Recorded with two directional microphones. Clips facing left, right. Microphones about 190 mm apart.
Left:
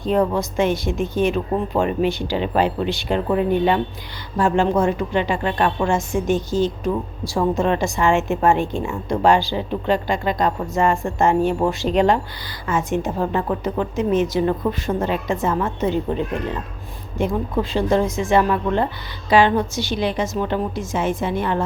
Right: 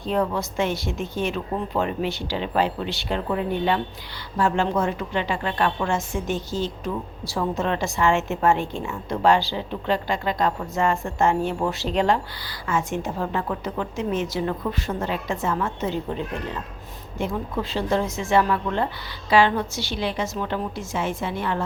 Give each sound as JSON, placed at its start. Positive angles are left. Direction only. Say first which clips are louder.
{"t": 0.0, "sound": "a woman's voice", "louder": "left 5 dB", "side_deg": 15}
{"t": 5.4, "sound": "a woman's voice", "louder": "left 4 dB", "side_deg": 30}
{"t": 5.9, "sound": "a woman's voice", "louder": "left 6 dB", "side_deg": 15}